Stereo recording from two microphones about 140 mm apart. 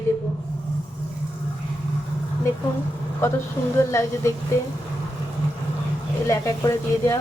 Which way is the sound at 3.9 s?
20° left (ahead or behind).